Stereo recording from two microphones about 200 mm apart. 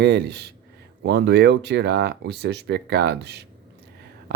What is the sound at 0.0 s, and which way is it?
Speech, 55° right (ahead or behind).